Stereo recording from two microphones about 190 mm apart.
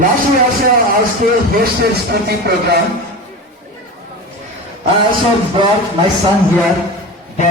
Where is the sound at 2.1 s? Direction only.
55° right (ahead or behind).